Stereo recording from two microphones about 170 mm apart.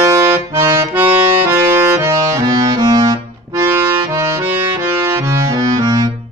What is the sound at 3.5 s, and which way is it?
Accordion, 20° right (ahead or behind).